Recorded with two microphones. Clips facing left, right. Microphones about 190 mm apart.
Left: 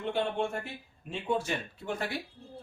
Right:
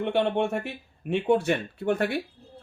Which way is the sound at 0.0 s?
70° right (ahead or behind).